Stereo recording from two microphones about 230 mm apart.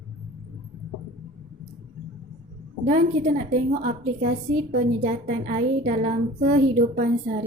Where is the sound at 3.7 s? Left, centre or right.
Right.